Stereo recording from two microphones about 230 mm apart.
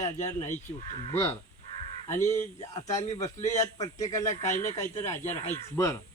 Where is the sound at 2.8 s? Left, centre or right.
Left.